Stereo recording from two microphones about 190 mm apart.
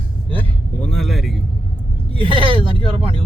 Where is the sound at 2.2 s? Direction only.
25° right (ahead or behind).